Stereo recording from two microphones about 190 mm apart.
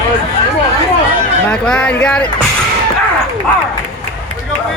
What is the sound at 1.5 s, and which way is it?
Speech, 5° left (ahead or behind).